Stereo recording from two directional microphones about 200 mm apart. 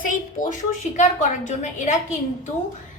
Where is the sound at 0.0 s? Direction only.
40° left (ahead or behind).